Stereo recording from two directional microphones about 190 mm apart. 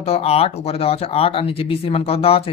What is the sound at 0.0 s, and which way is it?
Speech, 30° left (ahead or behind).